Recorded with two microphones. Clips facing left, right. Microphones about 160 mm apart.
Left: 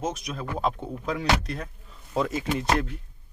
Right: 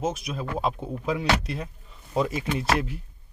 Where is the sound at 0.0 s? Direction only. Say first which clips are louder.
Right 2 dB; 5° right (ahead or behind).